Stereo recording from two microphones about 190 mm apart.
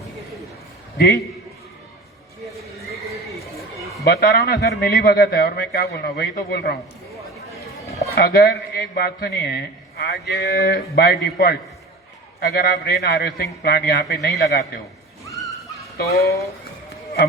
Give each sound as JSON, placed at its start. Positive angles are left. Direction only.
{"t": 0.9, "sound": "a man's voice", "side_deg": 55}
{"t": 4.0, "sound": "a man's voice", "side_deg": 55}
{"t": 8.1, "sound": "a man's voice", "side_deg": 55}
{"t": 15.2, "sound": "dog", "side_deg": 15}
{"t": 16.0, "sound": "a man's voice", "side_deg": 55}